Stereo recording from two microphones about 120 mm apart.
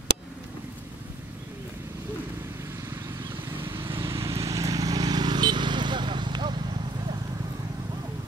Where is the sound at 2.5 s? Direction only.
20° right (ahead or behind); by 7.1 s 40° right (ahead or behind).